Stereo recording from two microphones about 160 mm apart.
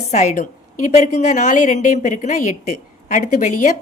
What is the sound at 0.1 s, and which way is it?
Speech, 45° left (ahead or behind).